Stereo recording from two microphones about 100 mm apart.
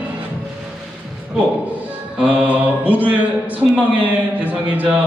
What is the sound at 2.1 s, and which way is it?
A man's voice, 10° right (ahead or behind).